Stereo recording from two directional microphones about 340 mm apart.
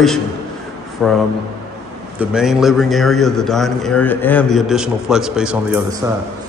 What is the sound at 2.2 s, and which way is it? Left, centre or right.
A man's voice, centre.